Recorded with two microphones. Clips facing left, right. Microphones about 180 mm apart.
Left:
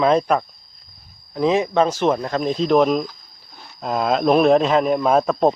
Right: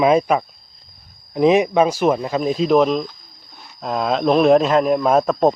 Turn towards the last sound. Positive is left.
turn(degrees=0)  # may be behind; listen again after turning